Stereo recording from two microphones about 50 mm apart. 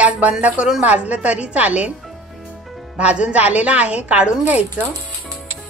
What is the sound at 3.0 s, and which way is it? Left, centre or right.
A woman's voice, right.